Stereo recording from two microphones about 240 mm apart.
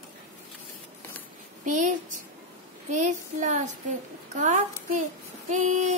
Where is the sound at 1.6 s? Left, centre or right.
Right.